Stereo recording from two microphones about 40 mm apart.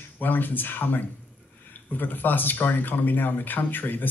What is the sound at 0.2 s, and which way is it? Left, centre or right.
Speech, left.